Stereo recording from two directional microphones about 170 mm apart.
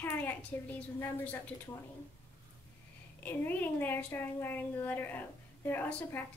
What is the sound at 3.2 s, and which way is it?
A woman's voice, 10° left (ahead or behind).